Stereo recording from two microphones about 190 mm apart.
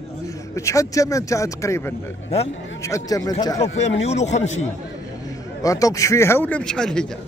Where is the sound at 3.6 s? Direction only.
35° left (ahead or behind).